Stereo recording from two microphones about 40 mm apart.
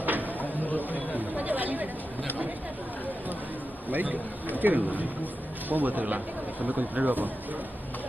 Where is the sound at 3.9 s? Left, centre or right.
Right.